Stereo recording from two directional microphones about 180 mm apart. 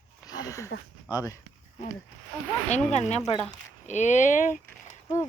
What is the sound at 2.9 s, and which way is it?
Speech, 40° left (ahead or behind).